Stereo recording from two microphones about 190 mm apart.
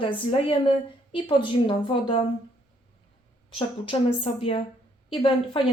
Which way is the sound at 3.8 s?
30° left (ahead or behind).